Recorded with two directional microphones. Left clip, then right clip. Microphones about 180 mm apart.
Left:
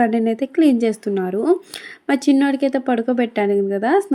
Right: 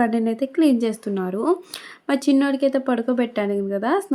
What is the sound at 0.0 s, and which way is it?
Speech, 10° left (ahead or behind).